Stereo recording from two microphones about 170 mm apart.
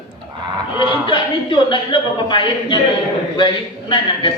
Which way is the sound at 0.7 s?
30° left (ahead or behind).